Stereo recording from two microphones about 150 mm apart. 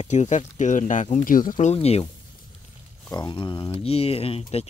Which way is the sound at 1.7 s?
45° left (ahead or behind).